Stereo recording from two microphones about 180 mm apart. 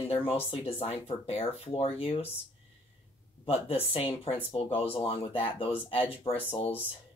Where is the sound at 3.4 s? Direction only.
30° left (ahead or behind).